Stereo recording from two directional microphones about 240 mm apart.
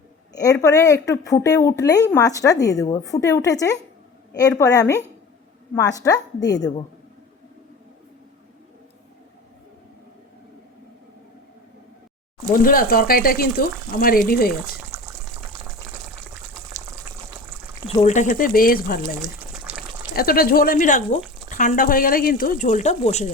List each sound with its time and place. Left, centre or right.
0.6 s a woman's voice: centre
12.6 s speech: left
14.9 s water: centre
16.7 s water: centre
18.0 s speech: left
19.2 s water: centre
20.1 s speech: left